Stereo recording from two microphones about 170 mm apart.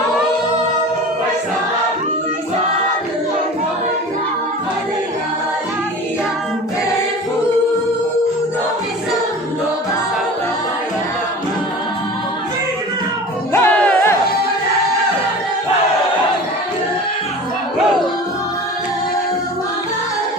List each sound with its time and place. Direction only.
13.5 s music: 15° left (ahead or behind)